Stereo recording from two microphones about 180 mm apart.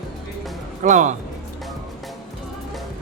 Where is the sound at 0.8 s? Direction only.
45° right (ahead or behind).